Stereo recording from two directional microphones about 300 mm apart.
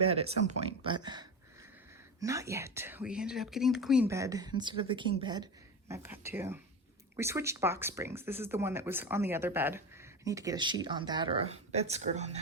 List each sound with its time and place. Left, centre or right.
0.0 s speech: centre